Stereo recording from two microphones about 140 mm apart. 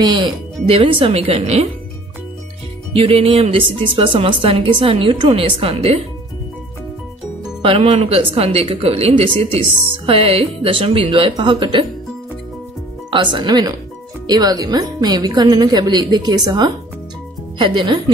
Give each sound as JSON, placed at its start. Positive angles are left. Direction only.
{"t": 0.0, "sound": "speech", "side_deg": -30}
{"t": 3.0, "sound": "speech", "side_deg": -45}
{"t": 7.6, "sound": "speech", "side_deg": -40}
{"t": 13.1, "sound": "a woman's voice", "side_deg": -35}